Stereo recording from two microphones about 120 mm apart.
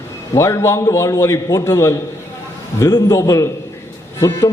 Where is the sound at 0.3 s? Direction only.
25° left (ahead or behind).